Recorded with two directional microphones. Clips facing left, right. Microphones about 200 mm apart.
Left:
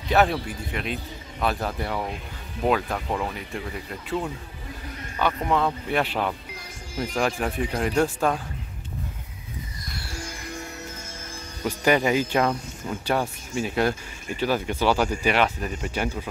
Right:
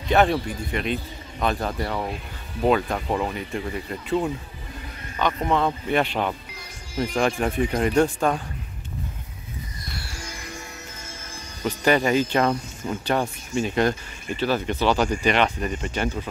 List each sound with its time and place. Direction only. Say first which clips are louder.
0.1 s speech: right 2 dB; 5° left (ahead or behind)
11.6 s speech: right 1 dB; 10° left (ahead or behind)